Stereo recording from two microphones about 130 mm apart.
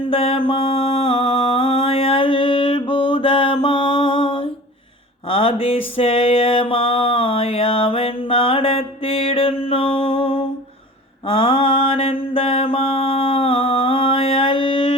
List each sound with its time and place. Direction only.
0.1 s mantra: 45° left (ahead or behind)
5.3 s a sound: 45° left (ahead or behind)
11.3 s mantra: 45° left (ahead or behind)